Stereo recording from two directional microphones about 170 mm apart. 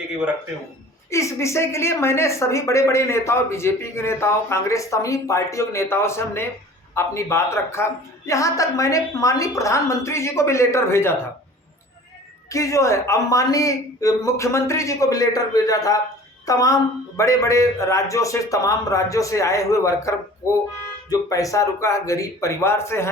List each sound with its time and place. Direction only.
1.1 s a woman's voice: 15° left (ahead or behind)
12.5 s speech: 20° left (ahead or behind)